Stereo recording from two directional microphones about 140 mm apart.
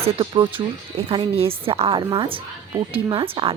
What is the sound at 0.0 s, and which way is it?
Speech, 35° right (ahead or behind).